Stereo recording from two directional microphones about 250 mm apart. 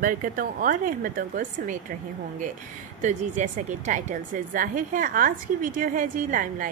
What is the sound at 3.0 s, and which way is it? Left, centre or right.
A woman's voice, right.